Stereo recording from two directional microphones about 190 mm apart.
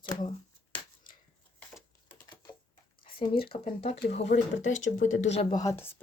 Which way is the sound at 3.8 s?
30° left (ahead or behind).